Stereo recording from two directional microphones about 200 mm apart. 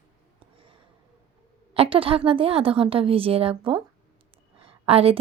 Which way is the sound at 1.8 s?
25° right (ahead or behind).